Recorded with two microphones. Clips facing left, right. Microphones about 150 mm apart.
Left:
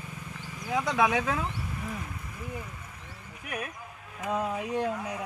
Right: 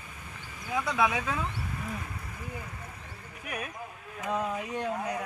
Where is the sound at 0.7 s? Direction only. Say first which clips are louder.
Left 2 dB; 15° left (ahead or behind).